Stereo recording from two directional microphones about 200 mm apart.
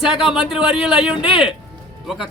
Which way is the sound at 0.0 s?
Centre (ahead or behind).